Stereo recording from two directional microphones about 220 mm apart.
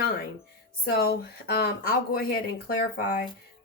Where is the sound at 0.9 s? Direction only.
45° left (ahead or behind).